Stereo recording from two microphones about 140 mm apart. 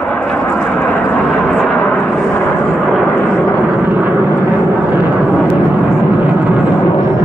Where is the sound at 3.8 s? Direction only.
15° right (ahead or behind).